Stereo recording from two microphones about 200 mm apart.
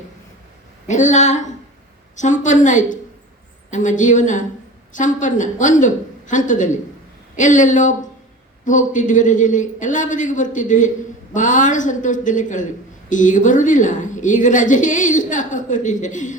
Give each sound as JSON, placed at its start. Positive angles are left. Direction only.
{"t": 0.9, "sound": "a man's voice", "side_deg": 35}